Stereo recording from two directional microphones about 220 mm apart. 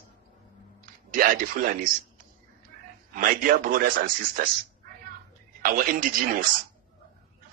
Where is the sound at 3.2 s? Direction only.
40° right (ahead or behind).